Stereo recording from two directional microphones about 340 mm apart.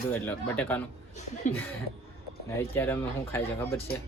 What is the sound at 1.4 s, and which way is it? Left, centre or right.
Speech, left.